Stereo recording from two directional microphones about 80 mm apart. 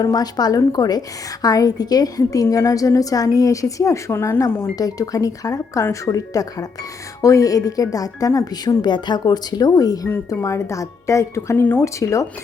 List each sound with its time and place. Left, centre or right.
0.0 s a woman's voice: left
4.7 s a woman's voice: left
8.8 s speech: left
12.0 s a woman's voice: left